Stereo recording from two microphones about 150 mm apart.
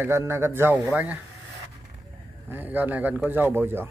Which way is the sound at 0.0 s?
15° right (ahead or behind).